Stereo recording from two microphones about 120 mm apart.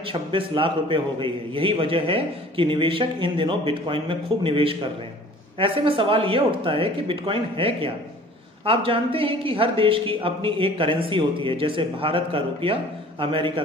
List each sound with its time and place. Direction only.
0.0 s a woman's voice: 45° right (ahead or behind)